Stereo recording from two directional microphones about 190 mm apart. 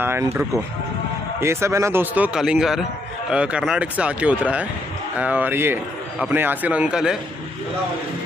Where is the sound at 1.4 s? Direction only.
15° right (ahead or behind).